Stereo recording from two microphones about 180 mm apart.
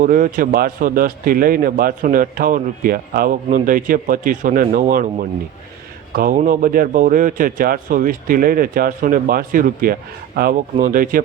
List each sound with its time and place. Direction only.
0.0 s a man's voice: 50° right (ahead or behind)